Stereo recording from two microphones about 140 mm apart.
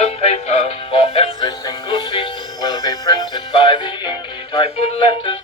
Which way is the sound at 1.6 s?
30° left (ahead or behind).